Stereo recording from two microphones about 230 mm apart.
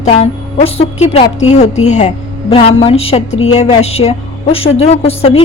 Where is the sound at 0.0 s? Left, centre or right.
Left.